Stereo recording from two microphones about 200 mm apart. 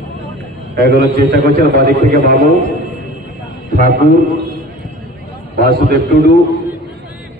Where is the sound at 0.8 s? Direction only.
55° right (ahead or behind).